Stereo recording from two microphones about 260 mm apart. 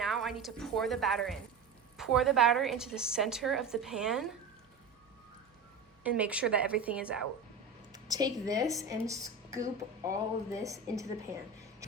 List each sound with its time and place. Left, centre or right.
0.0 s a woman's voice: centre
6.0 s a woman's voice: centre